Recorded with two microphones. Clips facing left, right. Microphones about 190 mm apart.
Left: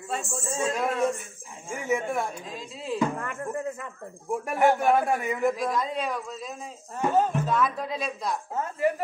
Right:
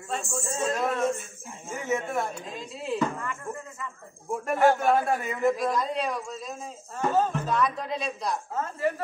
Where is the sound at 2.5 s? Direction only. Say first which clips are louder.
Right 1 dB; centre (ahead or behind).